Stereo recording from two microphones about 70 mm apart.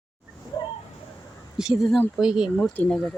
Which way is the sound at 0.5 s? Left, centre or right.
Left.